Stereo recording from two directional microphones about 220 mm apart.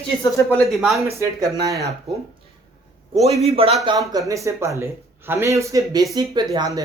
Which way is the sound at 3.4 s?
25° right (ahead or behind).